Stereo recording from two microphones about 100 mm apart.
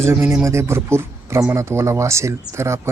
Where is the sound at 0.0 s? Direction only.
25° right (ahead or behind).